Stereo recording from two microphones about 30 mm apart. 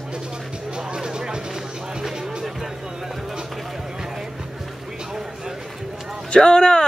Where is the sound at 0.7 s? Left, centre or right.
Right.